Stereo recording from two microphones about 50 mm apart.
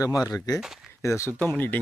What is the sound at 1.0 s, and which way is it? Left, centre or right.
Speech, left.